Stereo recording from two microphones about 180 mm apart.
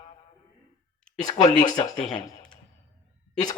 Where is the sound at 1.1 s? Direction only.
20° left (ahead or behind).